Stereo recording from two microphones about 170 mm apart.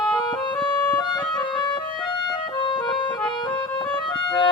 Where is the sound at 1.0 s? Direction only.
25° left (ahead or behind).